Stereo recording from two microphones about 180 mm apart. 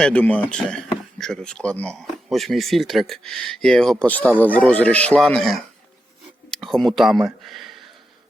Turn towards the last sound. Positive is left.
turn(degrees=0)  # may be behind; listen again after turning